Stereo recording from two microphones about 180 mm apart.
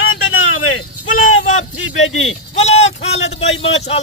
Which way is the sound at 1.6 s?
90° left.